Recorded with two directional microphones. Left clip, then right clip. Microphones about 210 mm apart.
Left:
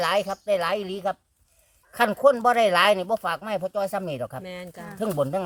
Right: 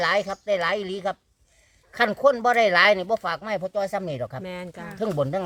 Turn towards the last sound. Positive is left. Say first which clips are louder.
# even
turn(degrees=0)  # may be behind; listen again after turning